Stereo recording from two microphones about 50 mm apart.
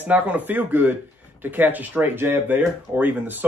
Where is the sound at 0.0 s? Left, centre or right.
Right.